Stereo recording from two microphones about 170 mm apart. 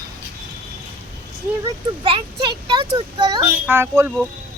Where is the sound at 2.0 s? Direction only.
30° right (ahead or behind).